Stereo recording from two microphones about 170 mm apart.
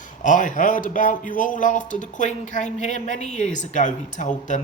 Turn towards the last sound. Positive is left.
turn(degrees=45)  # may be behind; listen again after turning